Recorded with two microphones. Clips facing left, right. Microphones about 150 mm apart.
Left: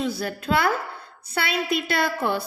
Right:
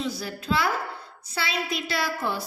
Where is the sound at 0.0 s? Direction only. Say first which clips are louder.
Left 4 dB; 55° left (ahead or behind).